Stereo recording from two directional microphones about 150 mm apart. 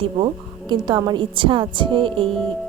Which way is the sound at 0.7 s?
30° right (ahead or behind).